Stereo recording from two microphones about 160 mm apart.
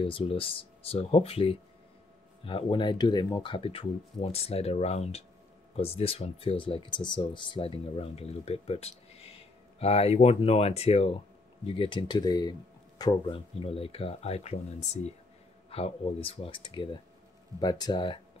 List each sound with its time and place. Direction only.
0.0 s speech: 35° left (ahead or behind)